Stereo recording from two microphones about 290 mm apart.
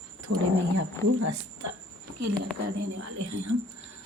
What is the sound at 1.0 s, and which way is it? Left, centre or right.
Speech, centre.